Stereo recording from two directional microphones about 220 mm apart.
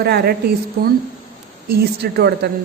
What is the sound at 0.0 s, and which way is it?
Speech, 45° right (ahead or behind).